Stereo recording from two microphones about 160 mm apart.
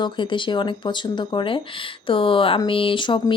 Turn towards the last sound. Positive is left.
turn(degrees=30)  # may be behind; listen again after turning